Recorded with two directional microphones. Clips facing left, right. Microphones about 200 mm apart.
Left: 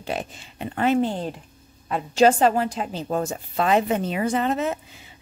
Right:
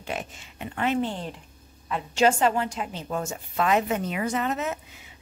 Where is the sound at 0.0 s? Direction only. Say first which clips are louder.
Left 4 dB; 35° left (ahead or behind).